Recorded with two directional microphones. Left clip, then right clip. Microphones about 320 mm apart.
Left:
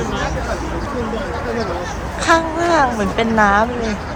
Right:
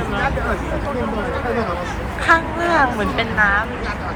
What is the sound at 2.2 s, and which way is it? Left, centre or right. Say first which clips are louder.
Speech: left 1 dB; centre.